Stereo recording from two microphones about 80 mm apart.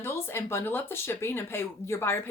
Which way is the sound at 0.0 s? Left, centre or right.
Left.